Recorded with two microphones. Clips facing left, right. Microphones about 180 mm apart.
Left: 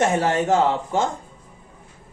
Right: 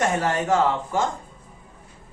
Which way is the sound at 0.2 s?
25° left (ahead or behind).